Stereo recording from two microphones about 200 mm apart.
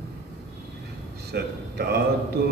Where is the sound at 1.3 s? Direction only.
50° right (ahead or behind).